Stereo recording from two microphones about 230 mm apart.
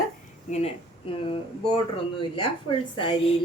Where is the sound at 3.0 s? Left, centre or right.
Left.